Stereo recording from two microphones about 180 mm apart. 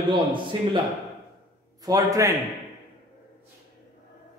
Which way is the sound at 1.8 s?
20° right (ahead or behind).